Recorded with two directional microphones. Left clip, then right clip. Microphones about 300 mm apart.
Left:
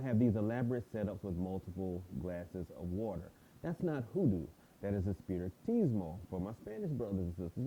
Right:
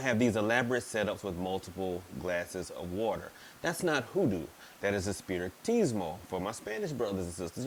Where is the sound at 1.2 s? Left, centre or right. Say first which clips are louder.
Right 8 dB; right.